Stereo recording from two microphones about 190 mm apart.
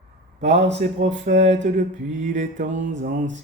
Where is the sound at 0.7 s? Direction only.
35° right (ahead or behind).